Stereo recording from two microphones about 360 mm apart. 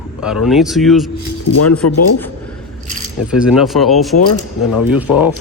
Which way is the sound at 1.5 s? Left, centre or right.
Left.